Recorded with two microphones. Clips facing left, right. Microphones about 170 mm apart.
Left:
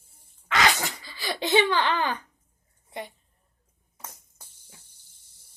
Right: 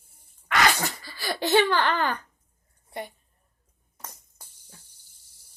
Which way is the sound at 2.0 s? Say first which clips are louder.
Right 1 dB; 15° left (ahead or behind).